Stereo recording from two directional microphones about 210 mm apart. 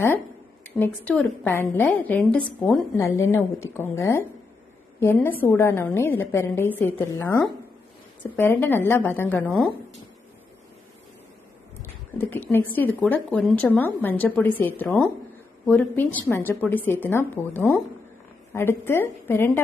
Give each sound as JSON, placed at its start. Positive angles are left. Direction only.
{"t": 0.7, "sound": "a woman's voice", "side_deg": 10}
{"t": 8.4, "sound": "a woman's voice", "side_deg": 10}
{"t": 12.2, "sound": "a woman's voice", "side_deg": 10}